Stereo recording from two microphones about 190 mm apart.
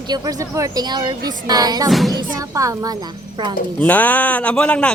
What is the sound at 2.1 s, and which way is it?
Speech, 20° right (ahead or behind).